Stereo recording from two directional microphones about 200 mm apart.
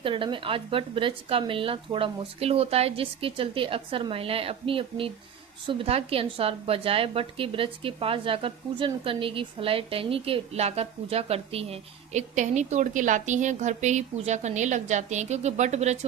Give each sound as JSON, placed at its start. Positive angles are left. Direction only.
{"t": 0.0, "sound": "a woman's voice", "side_deg": -25}